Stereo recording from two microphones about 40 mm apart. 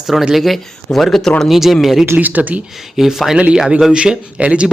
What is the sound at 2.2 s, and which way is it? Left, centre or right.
Speech, right.